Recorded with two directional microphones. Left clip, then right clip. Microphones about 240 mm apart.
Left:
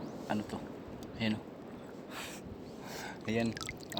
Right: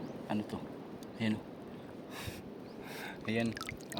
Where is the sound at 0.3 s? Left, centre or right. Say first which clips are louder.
Left 1 dB; centre.